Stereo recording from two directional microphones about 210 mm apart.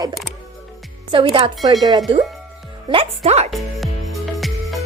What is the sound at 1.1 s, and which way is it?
A woman's voice, 25° right (ahead or behind).